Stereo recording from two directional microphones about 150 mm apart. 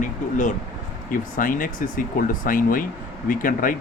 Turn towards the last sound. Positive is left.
turn(degrees=65)  # may be behind; listen again after turning